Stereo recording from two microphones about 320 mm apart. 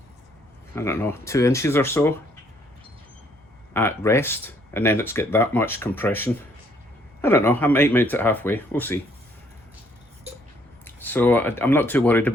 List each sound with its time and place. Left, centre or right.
0.8 s speech: centre
3.8 s speech: centre
10.8 s speech: centre